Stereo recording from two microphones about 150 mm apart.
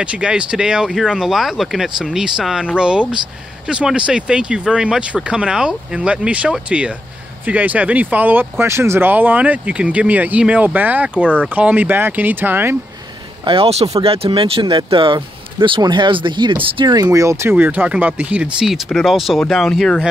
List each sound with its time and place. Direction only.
0.0 s speech: 5° right (ahead or behind)
13.4 s speech: 35° right (ahead or behind); by 20.1 s centre (ahead or behind)